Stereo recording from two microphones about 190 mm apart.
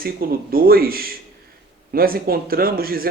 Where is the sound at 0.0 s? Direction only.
50° right (ahead or behind).